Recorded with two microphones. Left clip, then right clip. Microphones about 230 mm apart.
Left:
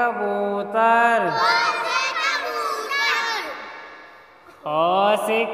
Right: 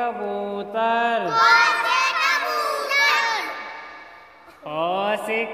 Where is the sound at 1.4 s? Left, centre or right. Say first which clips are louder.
Right 3 dB; right.